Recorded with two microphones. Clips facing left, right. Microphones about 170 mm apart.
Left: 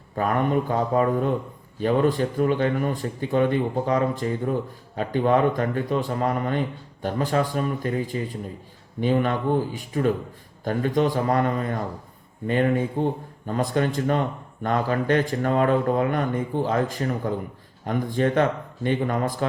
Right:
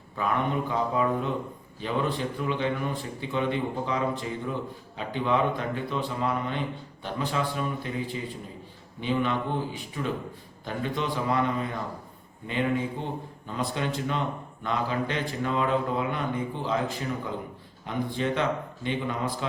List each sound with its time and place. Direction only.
0.2 s speech: 45° left (ahead or behind)